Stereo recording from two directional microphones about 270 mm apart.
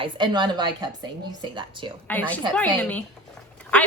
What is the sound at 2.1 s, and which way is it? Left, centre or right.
Speech, centre.